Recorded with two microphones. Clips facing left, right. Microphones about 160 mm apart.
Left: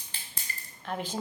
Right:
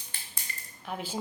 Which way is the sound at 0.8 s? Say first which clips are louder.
Left 1 dB; 10° right (ahead or behind).